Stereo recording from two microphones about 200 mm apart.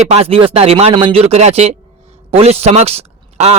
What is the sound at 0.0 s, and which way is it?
A man's voice, 30° right (ahead or behind).